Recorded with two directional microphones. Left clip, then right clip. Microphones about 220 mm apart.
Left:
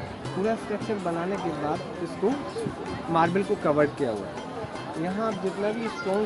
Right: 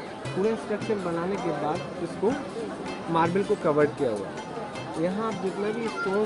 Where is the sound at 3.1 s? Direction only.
30° left (ahead or behind).